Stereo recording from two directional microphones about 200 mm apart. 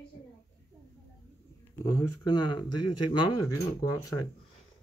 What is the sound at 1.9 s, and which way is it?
Speech, 15° left (ahead or behind).